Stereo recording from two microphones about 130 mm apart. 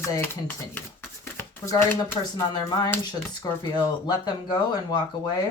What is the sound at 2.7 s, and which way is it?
Speech, 30° left (ahead or behind).